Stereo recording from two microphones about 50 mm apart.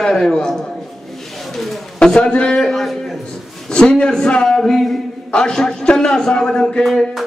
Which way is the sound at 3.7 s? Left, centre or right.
Centre.